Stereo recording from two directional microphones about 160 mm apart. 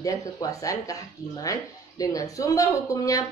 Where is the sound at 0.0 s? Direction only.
20° left (ahead or behind).